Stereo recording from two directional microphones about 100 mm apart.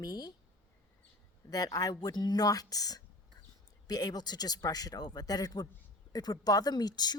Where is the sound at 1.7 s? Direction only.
35° left (ahead or behind).